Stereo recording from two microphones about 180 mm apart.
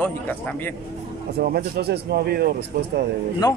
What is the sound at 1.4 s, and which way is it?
Speech, 60° right (ahead or behind).